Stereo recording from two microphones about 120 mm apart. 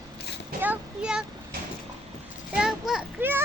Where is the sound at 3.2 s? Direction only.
15° right (ahead or behind).